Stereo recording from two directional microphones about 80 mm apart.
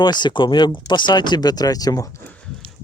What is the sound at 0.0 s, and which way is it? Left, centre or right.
Speech, left.